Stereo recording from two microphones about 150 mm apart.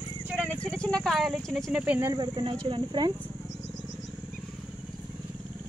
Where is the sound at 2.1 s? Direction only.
30° right (ahead or behind).